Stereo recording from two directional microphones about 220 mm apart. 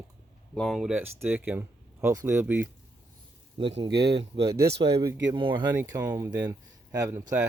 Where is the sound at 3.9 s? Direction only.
50° right (ahead or behind).